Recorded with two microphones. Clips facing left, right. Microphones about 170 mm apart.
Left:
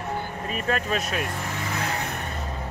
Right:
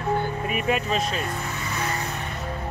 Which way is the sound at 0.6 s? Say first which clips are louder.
Right 1 dB; 5° right (ahead or behind).